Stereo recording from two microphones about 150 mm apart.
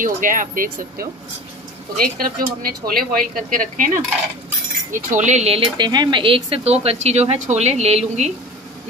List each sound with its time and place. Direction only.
0.0 s speech: 60° right (ahead or behind)
3.1 s speech: 65° right (ahead or behind); by 5.6 s 45° right (ahead or behind)
5.8 s speech: 30° right (ahead or behind); by 8.3 s 45° right (ahead or behind)